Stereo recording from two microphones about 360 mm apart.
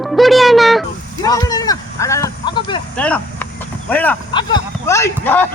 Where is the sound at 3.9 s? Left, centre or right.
Centre.